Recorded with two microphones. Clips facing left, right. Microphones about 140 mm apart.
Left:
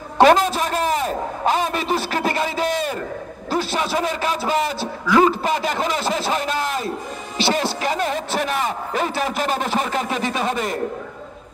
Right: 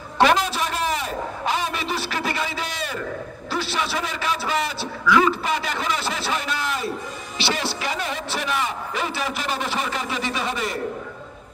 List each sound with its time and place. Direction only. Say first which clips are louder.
0.2 s a sound: left 5 dB; 45° left (ahead or behind)
3.4 s a man's voice: left 4 dB; 45° left (ahead or behind)
7.3 s music: left 5 dB; 45° left (ahead or behind)